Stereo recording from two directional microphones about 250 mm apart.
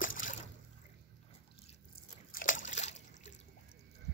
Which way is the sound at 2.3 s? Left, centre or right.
Left.